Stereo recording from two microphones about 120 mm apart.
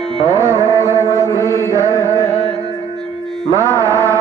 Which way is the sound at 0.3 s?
25° right (ahead or behind).